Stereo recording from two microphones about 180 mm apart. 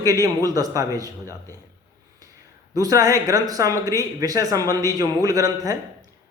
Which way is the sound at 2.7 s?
20° right (ahead or behind).